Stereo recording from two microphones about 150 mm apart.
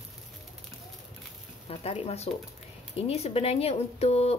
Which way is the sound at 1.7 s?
40° left (ahead or behind).